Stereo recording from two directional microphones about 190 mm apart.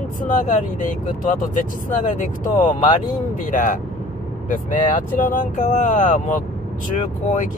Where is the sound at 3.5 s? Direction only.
45° left (ahead or behind).